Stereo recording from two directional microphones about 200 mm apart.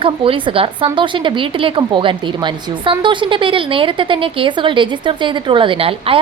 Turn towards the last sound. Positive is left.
turn(degrees=-30)  # may be behind; listen again after turning